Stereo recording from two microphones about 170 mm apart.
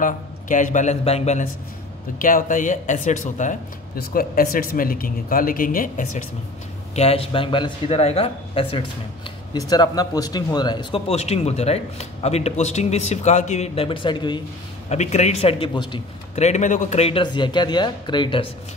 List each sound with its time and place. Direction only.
0.0 s a man's voice: 50° left (ahead or behind)
2.1 s speech: 50° left (ahead or behind)
7.0 s speech: 35° left (ahead or behind)
9.5 s speech: 25° left (ahead or behind)
14.9 s speech: 40° left (ahead or behind)
16.3 s speech: 40° left (ahead or behind)